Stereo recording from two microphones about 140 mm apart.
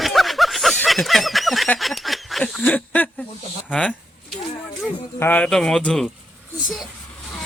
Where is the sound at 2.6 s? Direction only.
10° left (ahead or behind).